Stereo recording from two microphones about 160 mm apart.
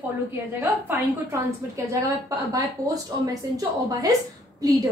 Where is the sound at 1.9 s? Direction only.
20° right (ahead or behind).